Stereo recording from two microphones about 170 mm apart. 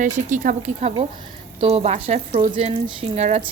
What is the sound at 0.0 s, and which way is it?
Speech, 50° right (ahead or behind).